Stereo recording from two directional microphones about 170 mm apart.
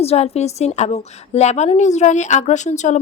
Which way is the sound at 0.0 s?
40° left (ahead or behind).